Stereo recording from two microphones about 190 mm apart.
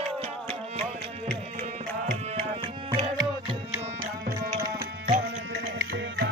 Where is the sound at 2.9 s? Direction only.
25° right (ahead or behind).